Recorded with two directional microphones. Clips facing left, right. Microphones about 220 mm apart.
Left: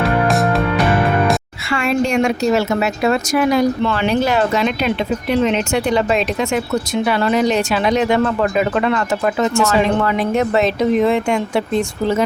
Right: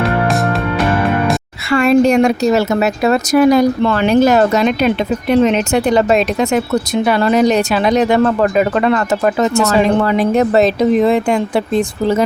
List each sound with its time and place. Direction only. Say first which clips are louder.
0.0 s music: even; centre (ahead or behind)
1.7 s speech: right 7 dB; 40° right (ahead or behind)